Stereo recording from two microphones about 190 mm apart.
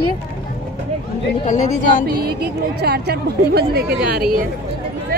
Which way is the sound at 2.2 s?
55° right (ahead or behind).